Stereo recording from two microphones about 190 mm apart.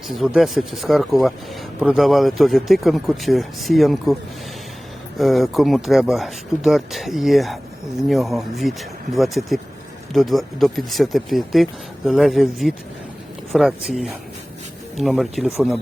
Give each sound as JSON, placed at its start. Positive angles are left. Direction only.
{"t": 0.1, "sound": "speech", "side_deg": 0}